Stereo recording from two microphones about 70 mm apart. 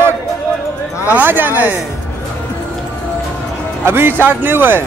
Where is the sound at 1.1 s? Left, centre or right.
Right.